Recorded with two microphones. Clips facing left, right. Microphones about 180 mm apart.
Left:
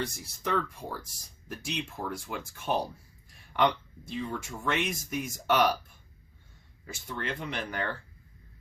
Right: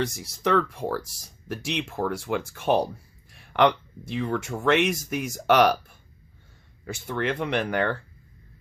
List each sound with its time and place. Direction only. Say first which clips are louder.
0.0 s speech: right 7 dB; 85° right; by 7.9 s 65° right (ahead or behind)